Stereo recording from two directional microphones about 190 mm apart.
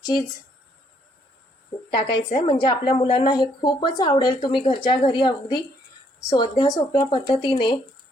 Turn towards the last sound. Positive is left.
turn(degrees=25)  # may be behind; listen again after turning